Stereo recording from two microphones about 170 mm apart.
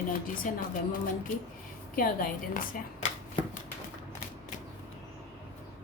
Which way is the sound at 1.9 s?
55° left (ahead or behind).